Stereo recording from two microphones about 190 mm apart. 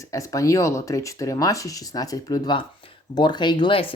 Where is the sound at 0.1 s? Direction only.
15° left (ahead or behind).